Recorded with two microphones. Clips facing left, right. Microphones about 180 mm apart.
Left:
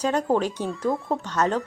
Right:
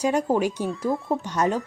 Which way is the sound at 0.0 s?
10° right (ahead or behind).